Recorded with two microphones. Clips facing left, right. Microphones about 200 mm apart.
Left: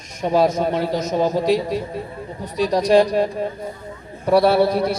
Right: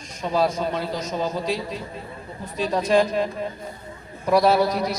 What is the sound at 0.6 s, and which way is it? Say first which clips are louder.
Speech: left 6 dB; 55° left (ahead or behind).